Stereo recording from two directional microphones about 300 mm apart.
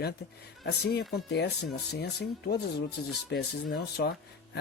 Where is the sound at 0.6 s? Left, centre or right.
Left.